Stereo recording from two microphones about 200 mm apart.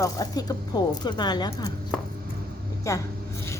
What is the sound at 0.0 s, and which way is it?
A woman's voice, 20° left (ahead or behind).